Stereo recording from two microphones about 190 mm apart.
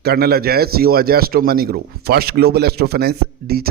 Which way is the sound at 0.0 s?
55° right (ahead or behind).